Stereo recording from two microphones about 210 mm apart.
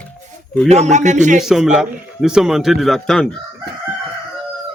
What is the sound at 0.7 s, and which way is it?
Speech, 35° right (ahead or behind).